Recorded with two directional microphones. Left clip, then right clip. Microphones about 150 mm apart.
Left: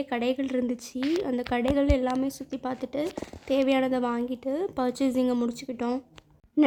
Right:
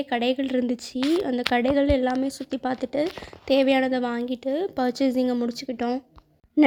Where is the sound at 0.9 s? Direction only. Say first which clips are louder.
Right 5 dB; centre (ahead or behind).